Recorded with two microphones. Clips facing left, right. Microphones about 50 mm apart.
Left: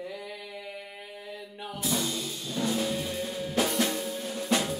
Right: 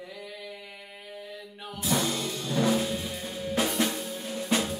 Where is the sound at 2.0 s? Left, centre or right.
Right.